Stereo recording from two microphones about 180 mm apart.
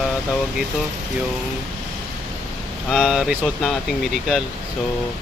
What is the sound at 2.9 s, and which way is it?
Speech, centre (ahead or behind).